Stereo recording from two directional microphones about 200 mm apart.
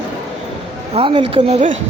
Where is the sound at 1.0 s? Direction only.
25° right (ahead or behind).